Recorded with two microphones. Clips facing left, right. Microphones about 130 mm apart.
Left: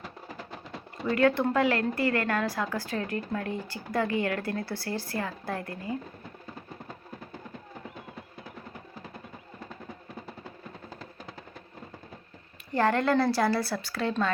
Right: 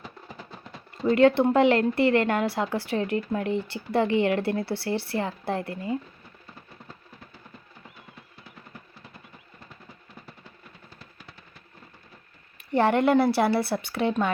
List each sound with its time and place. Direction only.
1.0 s speech: 25° right (ahead or behind)
12.7 s speech: 25° right (ahead or behind)